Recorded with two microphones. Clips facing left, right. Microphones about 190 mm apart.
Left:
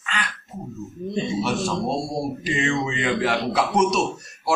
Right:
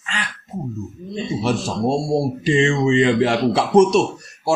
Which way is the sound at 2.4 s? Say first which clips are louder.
Right 7 dB; 30° right (ahead or behind).